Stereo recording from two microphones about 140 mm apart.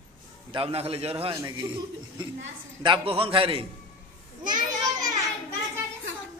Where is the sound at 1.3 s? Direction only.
20° right (ahead or behind).